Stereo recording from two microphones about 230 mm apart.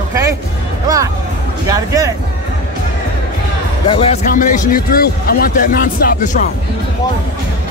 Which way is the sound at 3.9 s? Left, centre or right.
Left.